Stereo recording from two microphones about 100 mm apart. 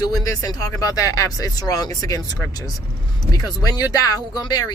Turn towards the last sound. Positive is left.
turn(degrees=40)  # may be behind; listen again after turning